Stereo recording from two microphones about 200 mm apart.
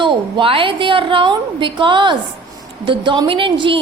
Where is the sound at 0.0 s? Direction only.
25° right (ahead or behind).